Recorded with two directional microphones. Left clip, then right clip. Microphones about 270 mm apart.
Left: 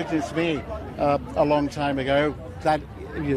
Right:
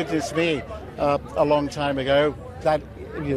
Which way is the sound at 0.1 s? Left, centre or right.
Right.